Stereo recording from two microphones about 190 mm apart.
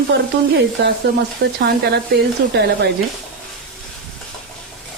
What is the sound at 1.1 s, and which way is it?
Speech, 55° right (ahead or behind).